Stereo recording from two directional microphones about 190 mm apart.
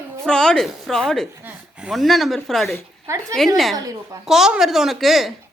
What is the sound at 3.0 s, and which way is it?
Speech, 15° right (ahead or behind).